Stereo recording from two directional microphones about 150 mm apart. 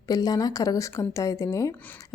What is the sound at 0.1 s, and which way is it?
A woman's voice, 25° left (ahead or behind).